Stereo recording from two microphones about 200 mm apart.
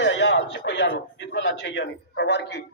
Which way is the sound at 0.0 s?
60° left (ahead or behind).